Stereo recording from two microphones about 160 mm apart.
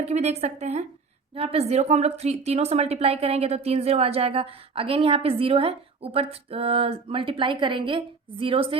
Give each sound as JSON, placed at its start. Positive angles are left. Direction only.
{"t": 0.0, "sound": "a woman's voice", "side_deg": -45}